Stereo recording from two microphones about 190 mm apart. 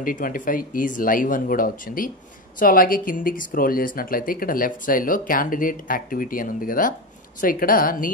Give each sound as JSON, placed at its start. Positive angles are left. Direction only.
{"t": 0.0, "sound": "speech", "side_deg": 45}